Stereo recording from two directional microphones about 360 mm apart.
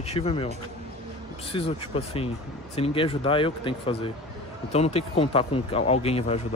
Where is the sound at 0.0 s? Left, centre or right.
Centre.